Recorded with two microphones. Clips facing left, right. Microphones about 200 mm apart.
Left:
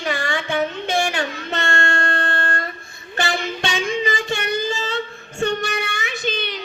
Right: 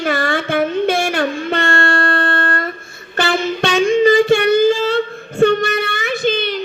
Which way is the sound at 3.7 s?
55° right (ahead or behind).